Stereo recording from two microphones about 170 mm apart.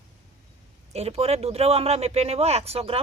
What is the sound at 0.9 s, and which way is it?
Speech, 35° right (ahead or behind).